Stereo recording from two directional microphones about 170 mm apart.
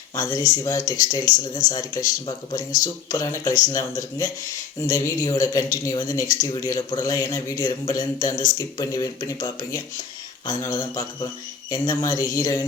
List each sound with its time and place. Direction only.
0.2 s speech: 20° left (ahead or behind)